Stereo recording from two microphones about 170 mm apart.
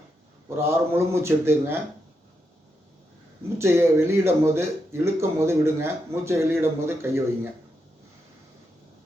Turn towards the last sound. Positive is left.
turn(degrees=-15)  # may be behind; listen again after turning